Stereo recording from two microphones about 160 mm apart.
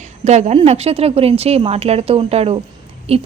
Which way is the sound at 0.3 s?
45° right (ahead or behind).